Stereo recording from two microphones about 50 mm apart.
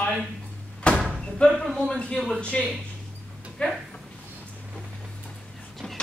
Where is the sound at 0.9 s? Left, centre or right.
Centre.